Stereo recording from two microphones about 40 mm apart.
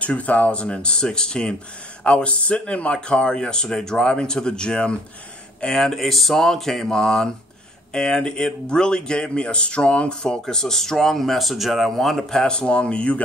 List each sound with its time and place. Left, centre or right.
0.0 s speech: left
5.7 s speech: centre; by 10.1 s left
10.2 s speech: centre